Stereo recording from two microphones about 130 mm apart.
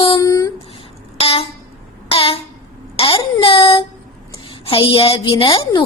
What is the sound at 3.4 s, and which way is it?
A woman's voice, 45° left (ahead or behind).